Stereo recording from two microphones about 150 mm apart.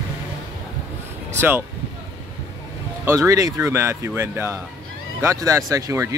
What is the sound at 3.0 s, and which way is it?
Speech, 20° right (ahead or behind).